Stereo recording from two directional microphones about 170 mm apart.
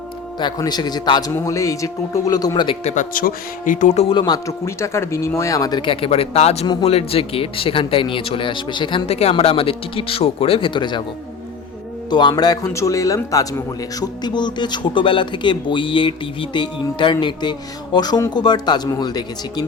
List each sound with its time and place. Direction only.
0.3 s speech: 25° left (ahead or behind)
2.8 s speech: 45° left (ahead or behind)
4.1 s speech: 25° left (ahead or behind)
12.1 s speech: 25° left (ahead or behind)